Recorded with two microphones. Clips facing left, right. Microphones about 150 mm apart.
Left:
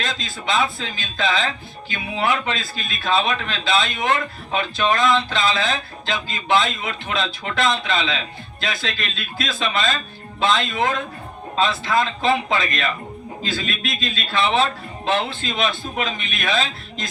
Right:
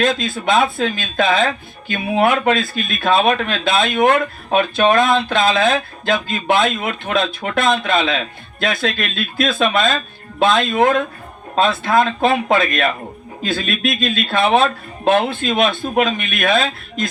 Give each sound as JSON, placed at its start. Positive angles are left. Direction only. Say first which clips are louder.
{"t": 0.0, "sound": "speech", "louder": "right 10 dB", "side_deg": -55}